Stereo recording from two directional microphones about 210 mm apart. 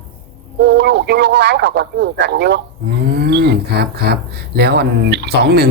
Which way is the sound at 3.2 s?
50° right (ahead or behind).